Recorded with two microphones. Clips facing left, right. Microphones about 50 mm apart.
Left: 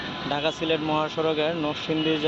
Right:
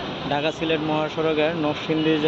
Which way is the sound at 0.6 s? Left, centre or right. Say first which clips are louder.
Right 1 dB; centre.